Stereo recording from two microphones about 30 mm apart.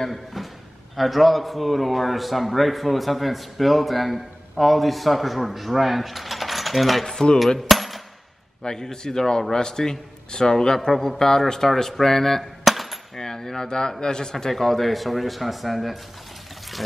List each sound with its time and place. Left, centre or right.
0.1 s a man's voice: centre
7.3 s music: centre
8.9 s a man's voice: centre
10.9 s speech: centre
11.1 s speech: centre
12.6 s a sound: centre
13.1 s coin: centre
13.7 s a man's voice: left
14.5 s a man's voice: centre